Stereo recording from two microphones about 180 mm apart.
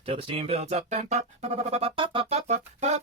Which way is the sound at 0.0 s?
30° right (ahead or behind).